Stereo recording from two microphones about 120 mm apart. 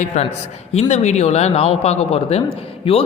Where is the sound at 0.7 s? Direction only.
60° left (ahead or behind).